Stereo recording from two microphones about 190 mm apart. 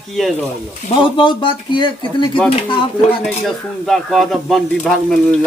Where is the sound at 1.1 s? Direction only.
25° left (ahead or behind).